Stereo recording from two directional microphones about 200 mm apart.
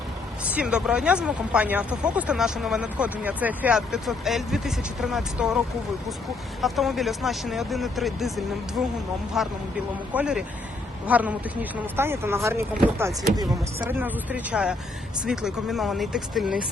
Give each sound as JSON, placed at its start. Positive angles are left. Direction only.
{"t": 0.4, "sound": "speech", "side_deg": -5}
{"t": 6.6, "sound": "speech", "side_deg": 0}
{"t": 9.4, "sound": "speech", "side_deg": 0}